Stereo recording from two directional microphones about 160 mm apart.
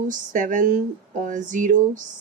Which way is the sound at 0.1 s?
55° right (ahead or behind).